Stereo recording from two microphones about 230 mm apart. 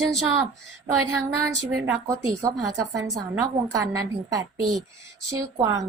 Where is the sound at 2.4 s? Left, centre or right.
Centre.